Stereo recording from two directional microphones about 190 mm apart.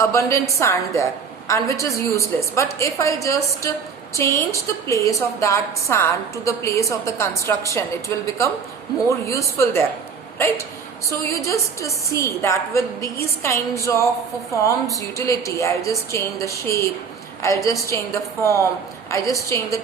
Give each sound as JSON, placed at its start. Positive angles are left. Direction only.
{"t": 0.0, "sound": "a woman's voice", "side_deg": 15}
{"t": 11.1, "sound": "a woman's voice", "side_deg": 15}
{"t": 15.3, "sound": "a woman's voice", "side_deg": 15}